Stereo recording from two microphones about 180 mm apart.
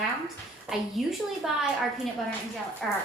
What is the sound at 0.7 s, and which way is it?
Speech, 5° right (ahead or behind).